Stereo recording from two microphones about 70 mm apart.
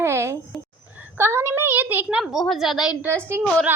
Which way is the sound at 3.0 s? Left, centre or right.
Right.